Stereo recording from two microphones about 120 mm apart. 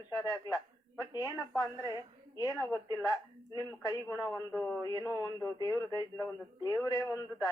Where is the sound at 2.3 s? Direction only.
30° left (ahead or behind).